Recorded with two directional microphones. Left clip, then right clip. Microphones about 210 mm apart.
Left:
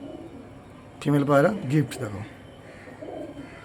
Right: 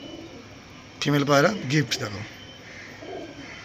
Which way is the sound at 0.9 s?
10° left (ahead or behind).